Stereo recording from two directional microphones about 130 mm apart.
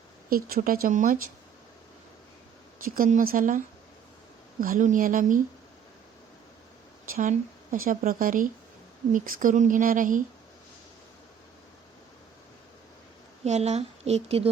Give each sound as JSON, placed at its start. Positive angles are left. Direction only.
{"t": 0.3, "sound": "speech", "side_deg": -90}
{"t": 2.8, "sound": "speech", "side_deg": -90}
{"t": 4.6, "sound": "speech", "side_deg": -85}
{"t": 7.0, "sound": "speech", "side_deg": -90}
{"t": 13.4, "sound": "a woman's voice", "side_deg": -60}